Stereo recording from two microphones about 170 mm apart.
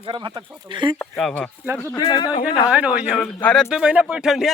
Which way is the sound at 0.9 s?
5° left (ahead or behind).